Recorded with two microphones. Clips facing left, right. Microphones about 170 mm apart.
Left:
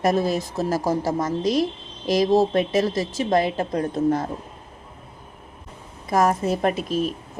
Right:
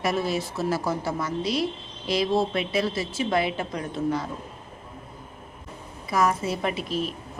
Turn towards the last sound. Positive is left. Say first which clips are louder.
# left 5 dB
turn(degrees=45)  # may be behind; listen again after turning